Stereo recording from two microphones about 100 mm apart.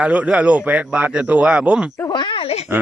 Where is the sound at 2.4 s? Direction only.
90° left.